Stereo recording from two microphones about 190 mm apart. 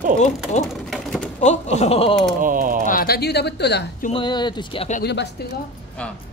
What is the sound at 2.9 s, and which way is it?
Speech, 50° left (ahead or behind).